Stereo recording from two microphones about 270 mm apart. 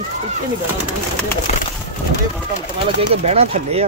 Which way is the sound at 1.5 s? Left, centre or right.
Left.